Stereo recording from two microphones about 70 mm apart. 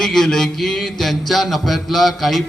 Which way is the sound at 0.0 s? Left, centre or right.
Centre.